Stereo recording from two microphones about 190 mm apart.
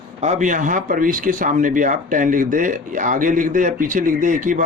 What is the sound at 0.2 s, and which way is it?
Speech, 40° right (ahead or behind).